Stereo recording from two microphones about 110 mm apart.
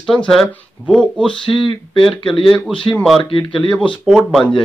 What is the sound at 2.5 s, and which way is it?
Speech, 5° left (ahead or behind).